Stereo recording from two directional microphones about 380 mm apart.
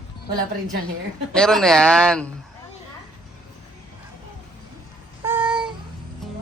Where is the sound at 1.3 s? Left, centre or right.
Centre.